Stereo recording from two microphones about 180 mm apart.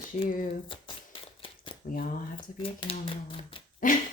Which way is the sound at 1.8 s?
50° left (ahead or behind).